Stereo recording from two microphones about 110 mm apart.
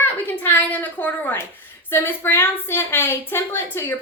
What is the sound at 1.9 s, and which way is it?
A woman's voice, 20° left (ahead or behind).